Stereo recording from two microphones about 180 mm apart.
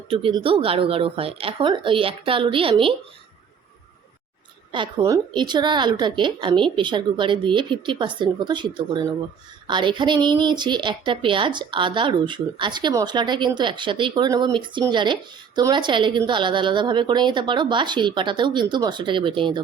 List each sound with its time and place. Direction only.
0.1 s a woman's voice: 30° right (ahead or behind)
4.7 s a woman's voice: 25° right (ahead or behind)